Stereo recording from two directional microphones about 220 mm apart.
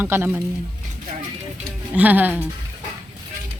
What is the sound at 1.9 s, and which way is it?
Speech, 5° right (ahead or behind).